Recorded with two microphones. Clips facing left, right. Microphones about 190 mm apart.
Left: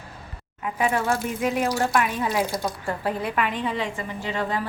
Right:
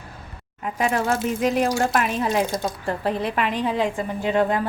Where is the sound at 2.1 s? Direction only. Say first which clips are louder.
Right 3 dB; 25° right (ahead or behind).